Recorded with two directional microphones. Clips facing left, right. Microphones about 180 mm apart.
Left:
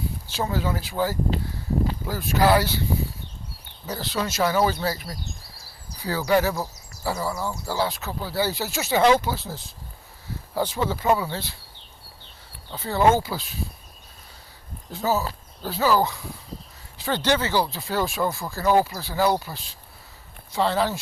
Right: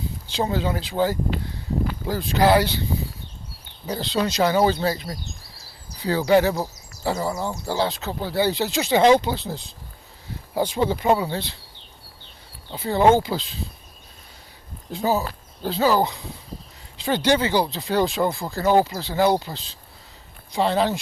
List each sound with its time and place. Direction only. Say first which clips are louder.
0.3 s speech: right 3 dB; 20° right (ahead or behind)
3.8 s speech: right 4 dB; 20° right (ahead or behind)
12.7 s speech: right 3 dB; 15° right (ahead or behind)
14.9 s speech: right 2 dB; 15° right (ahead or behind)